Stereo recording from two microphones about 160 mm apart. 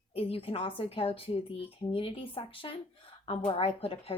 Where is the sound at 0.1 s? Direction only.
40° left (ahead or behind).